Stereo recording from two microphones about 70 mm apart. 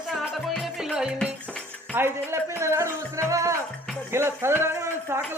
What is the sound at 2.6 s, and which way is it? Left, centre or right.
Music, right.